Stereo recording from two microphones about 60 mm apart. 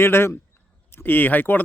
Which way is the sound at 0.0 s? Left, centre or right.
Left.